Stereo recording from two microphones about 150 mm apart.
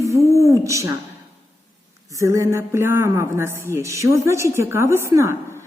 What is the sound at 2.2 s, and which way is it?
A woman's voice, 20° right (ahead or behind).